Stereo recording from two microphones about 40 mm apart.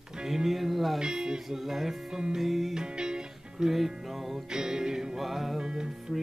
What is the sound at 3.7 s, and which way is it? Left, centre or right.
Music, centre.